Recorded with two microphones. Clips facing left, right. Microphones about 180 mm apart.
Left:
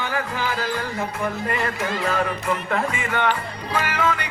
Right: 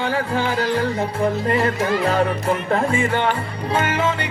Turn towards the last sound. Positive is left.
turn(degrees=-25)  # may be behind; listen again after turning